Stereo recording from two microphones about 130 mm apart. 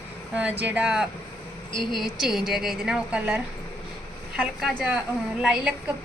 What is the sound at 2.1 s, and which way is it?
Speech, 5° right (ahead or behind).